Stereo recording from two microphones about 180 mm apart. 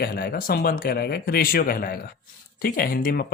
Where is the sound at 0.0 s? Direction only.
60° left (ahead or behind).